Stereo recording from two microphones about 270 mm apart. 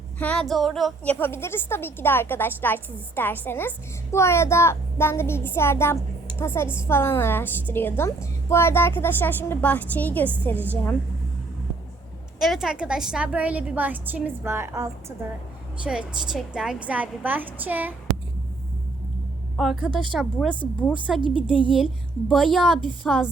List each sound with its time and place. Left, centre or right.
0.2 s a woman's voice: centre
12.4 s a woman's voice: centre
19.5 s a woman's voice: centre
21.2 s a woman's voice: centre
22.5 s a woman's voice: centre